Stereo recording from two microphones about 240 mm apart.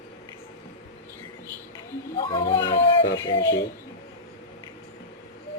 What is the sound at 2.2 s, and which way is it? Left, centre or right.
Speech, left.